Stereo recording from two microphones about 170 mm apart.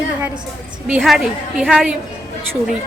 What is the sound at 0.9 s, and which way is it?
A woman's voice, 5° right (ahead or behind).